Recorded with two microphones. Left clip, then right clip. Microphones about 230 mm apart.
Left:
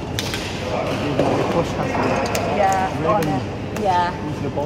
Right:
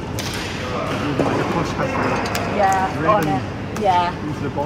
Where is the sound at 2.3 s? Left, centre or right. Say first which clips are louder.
Right 2 dB; centre.